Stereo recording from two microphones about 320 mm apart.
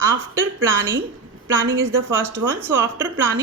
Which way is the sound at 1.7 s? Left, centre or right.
Right.